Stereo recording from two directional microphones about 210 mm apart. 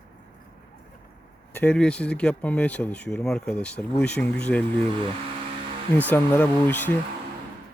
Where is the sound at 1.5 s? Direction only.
5° left (ahead or behind).